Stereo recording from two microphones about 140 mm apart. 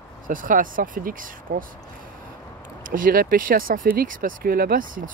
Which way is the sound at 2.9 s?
85° right.